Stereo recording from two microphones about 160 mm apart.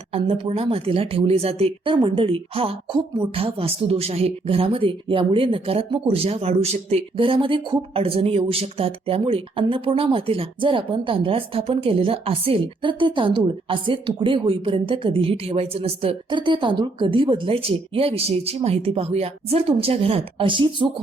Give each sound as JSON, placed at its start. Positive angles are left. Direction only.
{"t": 0.1, "sound": "speech", "side_deg": -35}